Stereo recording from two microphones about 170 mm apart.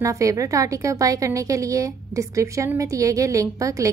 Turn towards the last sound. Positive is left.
turn(degrees=-20)  # may be behind; listen again after turning